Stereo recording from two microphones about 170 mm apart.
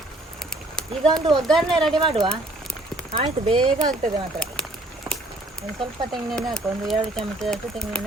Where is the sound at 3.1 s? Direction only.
40° right (ahead or behind).